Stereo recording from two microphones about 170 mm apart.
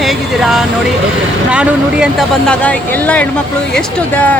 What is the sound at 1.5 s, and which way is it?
Speech, 5° right (ahead or behind).